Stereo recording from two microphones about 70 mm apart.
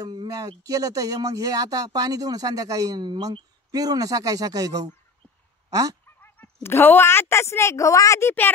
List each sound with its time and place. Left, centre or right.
0.0 s speech: right
6.0 s dog: left
6.6 s a woman's voice: left
8.2 s a woman's voice: left